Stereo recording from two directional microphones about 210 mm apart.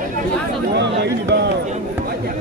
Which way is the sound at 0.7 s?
55° right (ahead or behind).